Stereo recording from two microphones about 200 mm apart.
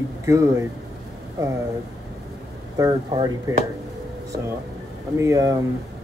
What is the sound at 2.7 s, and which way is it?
Speech, 20° right (ahead or behind).